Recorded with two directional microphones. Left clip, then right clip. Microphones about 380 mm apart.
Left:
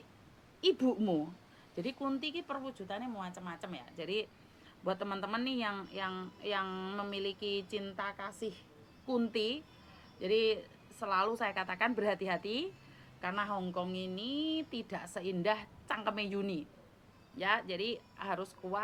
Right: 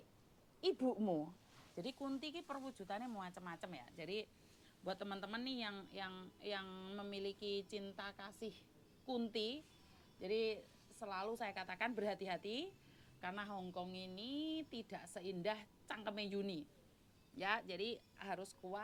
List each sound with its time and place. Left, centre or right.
0.6 s a woman's voice: centre
1.8 s speech: right
2.8 s speech: right
3.9 s a woman's voice: right
17.4 s speech: right